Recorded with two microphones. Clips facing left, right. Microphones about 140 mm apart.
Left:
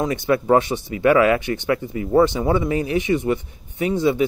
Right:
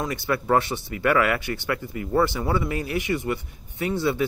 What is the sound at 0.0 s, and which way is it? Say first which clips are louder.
Speech: left 6 dB; 20° left (ahead or behind).